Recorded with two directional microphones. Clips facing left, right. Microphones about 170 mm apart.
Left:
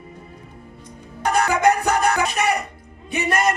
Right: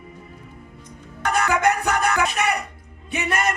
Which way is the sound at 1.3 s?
35° left (ahead or behind).